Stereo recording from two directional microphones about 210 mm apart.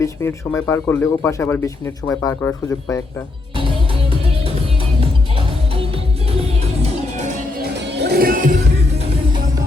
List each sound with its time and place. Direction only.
0.0 s speech: 15° left (ahead or behind)
7.6 s music: 50° right (ahead or behind)
9.0 s music: 20° right (ahead or behind)